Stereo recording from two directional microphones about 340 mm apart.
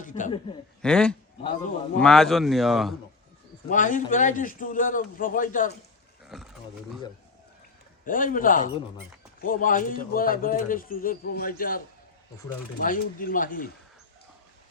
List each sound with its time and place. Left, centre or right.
0.0 s a man's voice: left
0.8 s speech: centre
3.7 s a man's voice: left
6.2 s a sound: centre
8.0 s a man's voice: left
12.8 s a man's voice: left